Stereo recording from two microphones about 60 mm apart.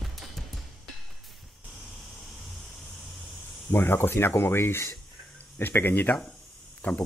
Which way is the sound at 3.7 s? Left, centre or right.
Left.